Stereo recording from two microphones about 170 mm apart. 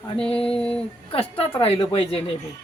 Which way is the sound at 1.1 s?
35° left (ahead or behind).